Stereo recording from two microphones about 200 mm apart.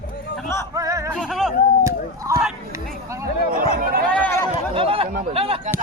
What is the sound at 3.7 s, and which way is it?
Speech, 50° right (ahead or behind).